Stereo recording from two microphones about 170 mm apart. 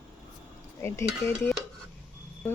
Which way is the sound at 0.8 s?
15° left (ahead or behind).